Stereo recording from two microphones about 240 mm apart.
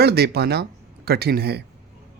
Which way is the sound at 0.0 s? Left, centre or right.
Right.